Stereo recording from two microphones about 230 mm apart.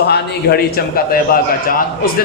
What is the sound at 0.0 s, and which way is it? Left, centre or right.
A man's voice, left.